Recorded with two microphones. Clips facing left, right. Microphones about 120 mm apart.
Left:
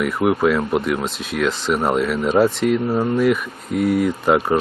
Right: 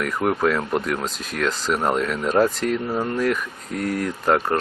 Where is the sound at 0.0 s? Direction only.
10° left (ahead or behind).